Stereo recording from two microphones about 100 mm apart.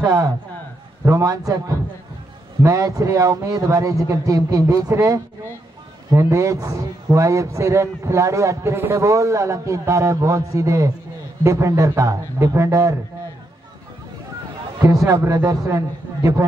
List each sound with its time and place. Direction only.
0.0 s a man's voice: 35° right (ahead or behind)
14.9 s a man's voice: 40° right (ahead or behind)